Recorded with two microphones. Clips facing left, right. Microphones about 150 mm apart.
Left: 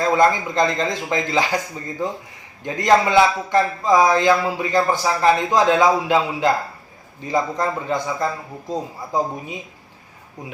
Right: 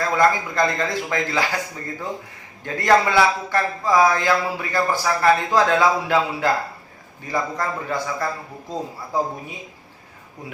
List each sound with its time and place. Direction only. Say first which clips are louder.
0.0 s speech: left 2 dB; 20° left (ahead or behind)
2.6 s speech: left 1 dB; 20° left (ahead or behind)